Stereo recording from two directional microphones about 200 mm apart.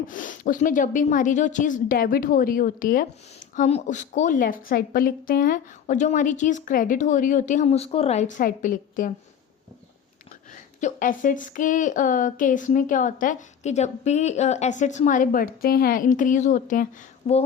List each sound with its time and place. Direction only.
0.1 s a woman's voice: 40° left (ahead or behind)
10.8 s a woman's voice: 40° left (ahead or behind)